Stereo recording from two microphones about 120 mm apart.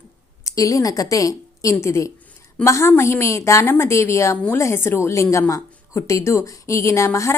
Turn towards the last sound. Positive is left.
turn(degrees=25)  # may be behind; listen again after turning